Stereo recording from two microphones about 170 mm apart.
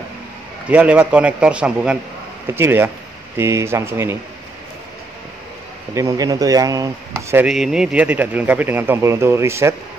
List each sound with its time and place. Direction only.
0.7 s a man's voice: 5° right (ahead or behind)
5.9 s speech: 20° right (ahead or behind)
7.4 s a man's voice: 5° right (ahead or behind)